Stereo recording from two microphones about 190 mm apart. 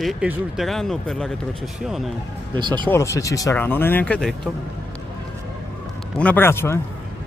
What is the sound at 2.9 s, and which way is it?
Speech, 15° left (ahead or behind).